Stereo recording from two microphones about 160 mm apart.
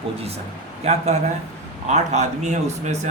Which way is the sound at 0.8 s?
45° right (ahead or behind).